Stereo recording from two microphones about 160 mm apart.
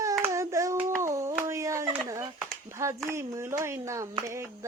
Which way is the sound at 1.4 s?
20° right (ahead or behind).